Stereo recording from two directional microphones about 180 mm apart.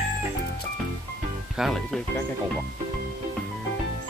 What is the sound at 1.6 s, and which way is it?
Speech, centre (ahead or behind).